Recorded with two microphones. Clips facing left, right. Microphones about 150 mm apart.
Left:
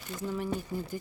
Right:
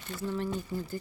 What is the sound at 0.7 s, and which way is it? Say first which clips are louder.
Speech: even; 15° left (ahead or behind).